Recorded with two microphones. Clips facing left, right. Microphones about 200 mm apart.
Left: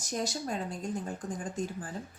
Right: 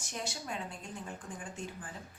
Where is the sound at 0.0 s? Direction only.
40° left (ahead or behind).